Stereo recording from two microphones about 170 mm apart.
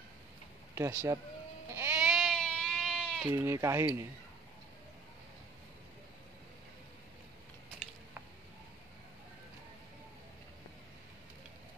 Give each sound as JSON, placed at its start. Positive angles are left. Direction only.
{"t": 0.7, "sound": "speech", "side_deg": -15}
{"t": 1.7, "sound": "goat", "side_deg": -10}
{"t": 3.3, "sound": "speech", "side_deg": -15}